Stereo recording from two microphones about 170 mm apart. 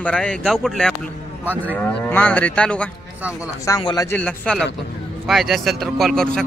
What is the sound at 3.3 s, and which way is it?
Speech, 20° left (ahead or behind).